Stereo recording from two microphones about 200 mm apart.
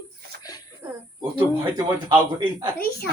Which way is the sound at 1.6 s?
20° right (ahead or behind).